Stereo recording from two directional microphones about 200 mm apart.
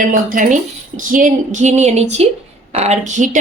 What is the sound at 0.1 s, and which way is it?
A woman's voice, 40° right (ahead or behind).